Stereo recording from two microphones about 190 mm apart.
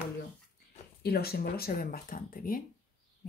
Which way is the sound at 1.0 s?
55° left (ahead or behind).